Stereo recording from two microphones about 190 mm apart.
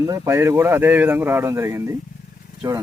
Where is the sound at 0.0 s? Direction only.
15° right (ahead or behind).